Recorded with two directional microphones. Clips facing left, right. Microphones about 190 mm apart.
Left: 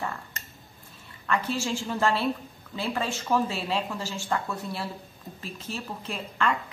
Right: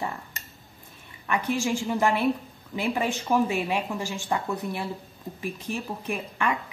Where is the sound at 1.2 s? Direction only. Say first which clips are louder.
Right 2 dB; 15° right (ahead or behind).